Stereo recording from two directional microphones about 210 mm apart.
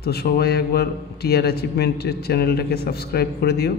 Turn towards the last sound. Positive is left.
turn(degrees=50)  # may be behind; listen again after turning